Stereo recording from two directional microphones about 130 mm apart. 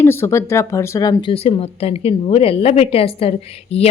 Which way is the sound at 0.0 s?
20° left (ahead or behind).